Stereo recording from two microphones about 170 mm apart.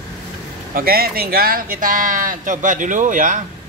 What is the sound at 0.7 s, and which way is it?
Speech, 60° right (ahead or behind).